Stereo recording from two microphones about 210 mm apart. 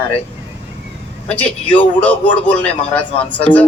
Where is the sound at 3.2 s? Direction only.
5° left (ahead or behind).